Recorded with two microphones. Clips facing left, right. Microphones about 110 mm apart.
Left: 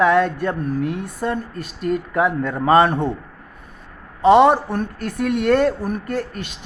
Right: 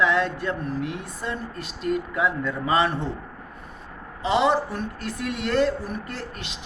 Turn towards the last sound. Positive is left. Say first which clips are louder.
# left 9 dB
turn(degrees=50)  # may be behind; listen again after turning